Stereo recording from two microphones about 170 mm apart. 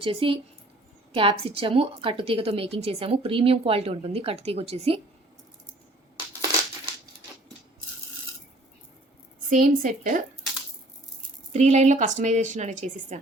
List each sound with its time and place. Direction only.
0.0 s a woman's voice: 30° right (ahead or behind)
9.5 s a woman's voice: 50° right (ahead or behind)
11.5 s a woman's voice: 40° right (ahead or behind)